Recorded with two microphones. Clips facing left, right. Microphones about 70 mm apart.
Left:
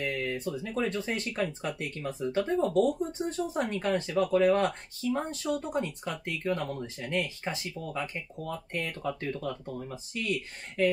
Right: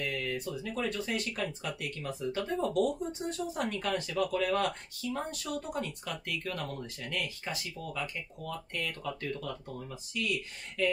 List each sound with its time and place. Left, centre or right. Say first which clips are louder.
0.0 s speech: left 3 dB; left